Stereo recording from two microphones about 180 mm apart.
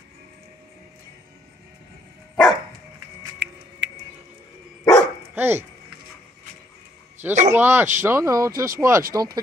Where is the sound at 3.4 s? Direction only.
75° right (ahead or behind).